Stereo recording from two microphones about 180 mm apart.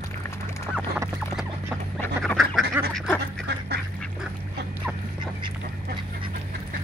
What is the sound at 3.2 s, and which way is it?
Duck, 65° right (ahead or behind).